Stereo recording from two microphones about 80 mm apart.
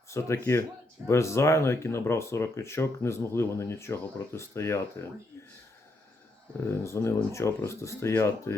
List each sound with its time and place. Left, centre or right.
0.1 s speech: left
6.7 s speech: left